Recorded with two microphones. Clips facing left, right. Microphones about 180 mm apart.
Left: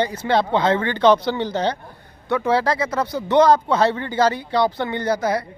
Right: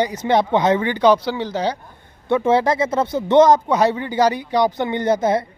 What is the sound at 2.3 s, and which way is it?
Speech, 20° right (ahead or behind).